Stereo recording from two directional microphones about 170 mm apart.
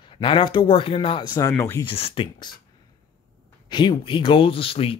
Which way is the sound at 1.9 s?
35° left (ahead or behind).